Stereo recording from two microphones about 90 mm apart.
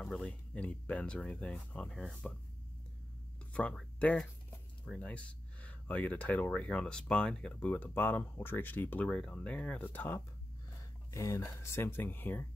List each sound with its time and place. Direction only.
0.0 s speech: 10° left (ahead or behind)
4.8 s speech: 15° left (ahead or behind)
11.1 s speech: 35° left (ahead or behind)